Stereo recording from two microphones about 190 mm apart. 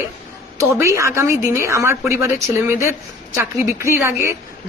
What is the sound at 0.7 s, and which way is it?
A woman's voice, 15° right (ahead or behind).